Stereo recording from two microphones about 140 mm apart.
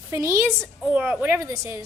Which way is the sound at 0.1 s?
20° right (ahead or behind).